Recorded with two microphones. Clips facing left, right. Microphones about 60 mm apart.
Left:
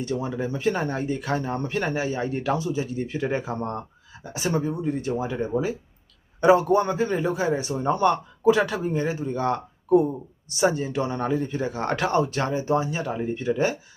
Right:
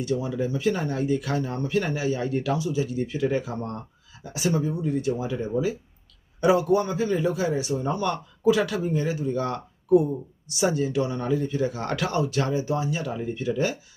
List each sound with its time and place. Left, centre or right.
0.0 s speech: left